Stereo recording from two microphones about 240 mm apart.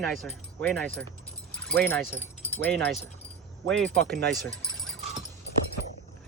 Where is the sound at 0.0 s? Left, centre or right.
Centre.